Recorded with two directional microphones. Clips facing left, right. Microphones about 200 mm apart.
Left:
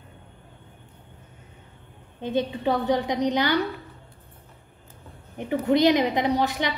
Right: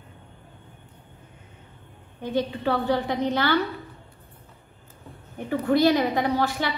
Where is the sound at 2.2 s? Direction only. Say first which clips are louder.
Left 1 dB; 20° left (ahead or behind).